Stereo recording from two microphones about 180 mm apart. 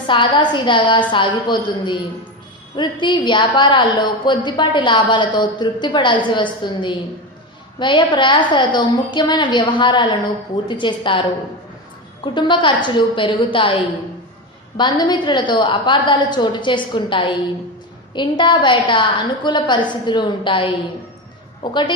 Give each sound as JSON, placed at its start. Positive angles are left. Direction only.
{"t": 0.1, "sound": "a woman's voice", "side_deg": 25}
{"t": 12.2, "sound": "a woman's voice", "side_deg": 25}
{"t": 14.8, "sound": "a woman's voice", "side_deg": 25}